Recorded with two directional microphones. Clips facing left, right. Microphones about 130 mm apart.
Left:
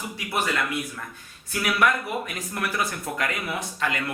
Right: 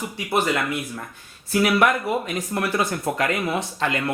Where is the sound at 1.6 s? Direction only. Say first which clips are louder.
Right 3 dB; 25° right (ahead or behind).